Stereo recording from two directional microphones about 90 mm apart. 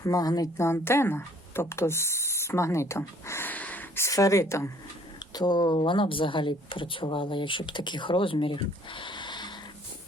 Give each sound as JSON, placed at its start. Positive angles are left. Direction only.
{"t": 0.0, "sound": "a woman's voice", "side_deg": 45}
{"t": 0.5, "sound": "speech", "side_deg": 30}
{"t": 3.5, "sound": "a sound", "side_deg": 20}
{"t": 4.1, "sound": "speech", "side_deg": 40}
{"t": 5.3, "sound": "speech", "side_deg": 50}
{"t": 5.7, "sound": "speech", "side_deg": 70}